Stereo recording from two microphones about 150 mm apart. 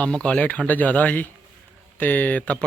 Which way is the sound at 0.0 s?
5° left (ahead or behind).